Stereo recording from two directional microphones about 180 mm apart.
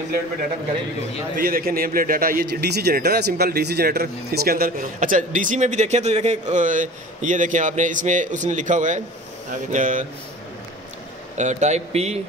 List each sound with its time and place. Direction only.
1.3 s a man's voice: 55° right (ahead or behind)
11.3 s speech: 40° right (ahead or behind)